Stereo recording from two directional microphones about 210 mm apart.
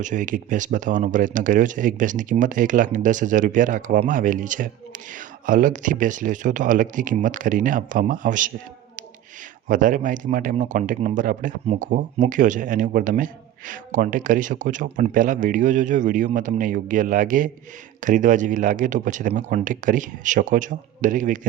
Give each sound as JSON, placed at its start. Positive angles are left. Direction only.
{"t": 0.0, "sound": "speech", "side_deg": -35}
{"t": 9.6, "sound": "speech", "side_deg": -40}